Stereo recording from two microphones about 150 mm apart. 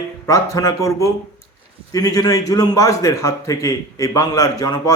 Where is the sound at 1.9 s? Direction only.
25° left (ahead or behind).